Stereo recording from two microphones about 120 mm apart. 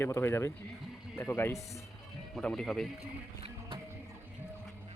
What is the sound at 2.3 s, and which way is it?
Speech, 5° left (ahead or behind).